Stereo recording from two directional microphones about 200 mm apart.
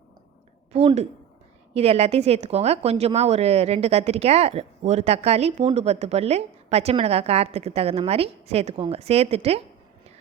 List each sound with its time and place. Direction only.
0.7 s a woman's voice: 30° right (ahead or behind)